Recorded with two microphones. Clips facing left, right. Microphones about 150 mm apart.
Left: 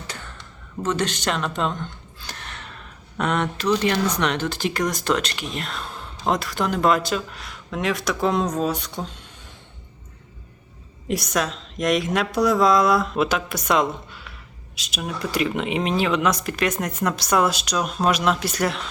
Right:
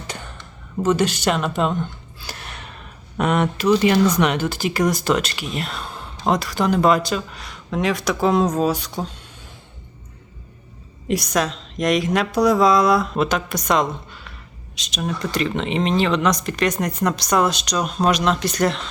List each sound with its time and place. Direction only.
0.1 s a sound: 15° right (ahead or behind)
0.8 s speech: 10° right (ahead or behind)
11.1 s speech: centre (ahead or behind)